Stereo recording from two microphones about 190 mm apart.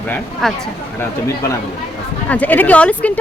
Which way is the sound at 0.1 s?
5° left (ahead or behind).